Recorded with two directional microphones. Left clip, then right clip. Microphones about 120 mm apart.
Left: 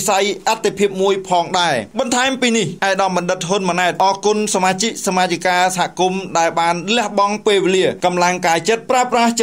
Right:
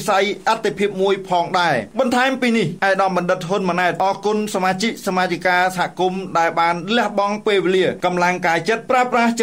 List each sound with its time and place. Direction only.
0.0 s speech: 35° left (ahead or behind)